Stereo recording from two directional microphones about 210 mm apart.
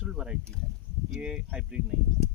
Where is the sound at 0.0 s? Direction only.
5° right (ahead or behind).